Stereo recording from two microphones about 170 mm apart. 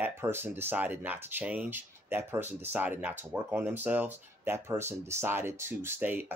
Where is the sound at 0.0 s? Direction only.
15° right (ahead or behind).